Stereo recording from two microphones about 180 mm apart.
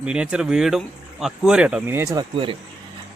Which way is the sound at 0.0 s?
5° right (ahead or behind).